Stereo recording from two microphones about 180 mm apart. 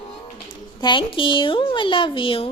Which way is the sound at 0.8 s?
25° left (ahead or behind).